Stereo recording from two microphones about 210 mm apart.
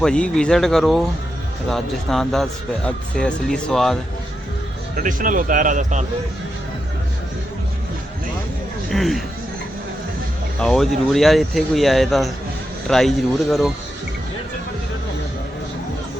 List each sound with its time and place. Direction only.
0.0 s a man's voice: 5° left (ahead or behind)
4.9 s speech: 40° right (ahead or behind)
8.9 s a man's voice: centre (ahead or behind)
10.6 s a man's voice: centre (ahead or behind)